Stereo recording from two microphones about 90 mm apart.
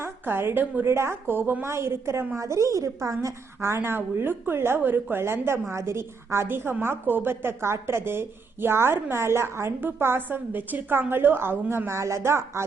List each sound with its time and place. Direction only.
0.0 s a woman's voice: 25° right (ahead or behind)